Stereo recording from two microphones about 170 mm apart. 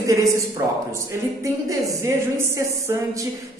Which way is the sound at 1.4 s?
20° right (ahead or behind).